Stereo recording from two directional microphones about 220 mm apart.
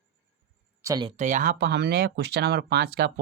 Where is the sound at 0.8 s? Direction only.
15° right (ahead or behind).